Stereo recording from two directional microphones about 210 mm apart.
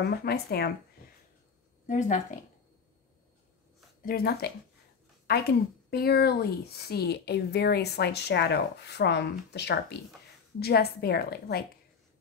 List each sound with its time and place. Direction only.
0.0 s speech: 50° left (ahead or behind)
1.9 s speech: 35° left (ahead or behind)
4.0 s speech: 45° left (ahead or behind)